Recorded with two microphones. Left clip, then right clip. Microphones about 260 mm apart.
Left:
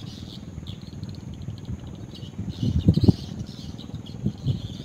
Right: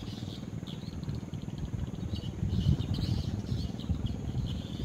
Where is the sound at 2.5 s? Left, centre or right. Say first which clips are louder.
Left 11 dB; left.